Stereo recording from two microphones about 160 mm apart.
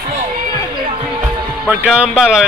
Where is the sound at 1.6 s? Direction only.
5° right (ahead or behind).